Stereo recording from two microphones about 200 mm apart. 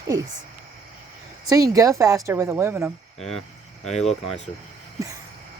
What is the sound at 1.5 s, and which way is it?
A woman's voice, 15° right (ahead or behind).